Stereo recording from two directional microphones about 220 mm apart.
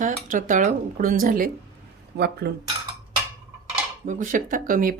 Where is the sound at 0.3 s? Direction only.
35° right (ahead or behind).